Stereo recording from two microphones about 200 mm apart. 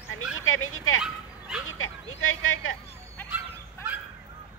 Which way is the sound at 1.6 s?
90° left.